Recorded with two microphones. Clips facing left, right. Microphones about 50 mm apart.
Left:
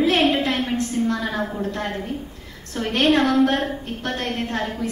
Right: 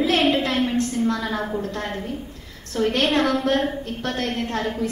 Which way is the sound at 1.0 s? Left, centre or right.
Left.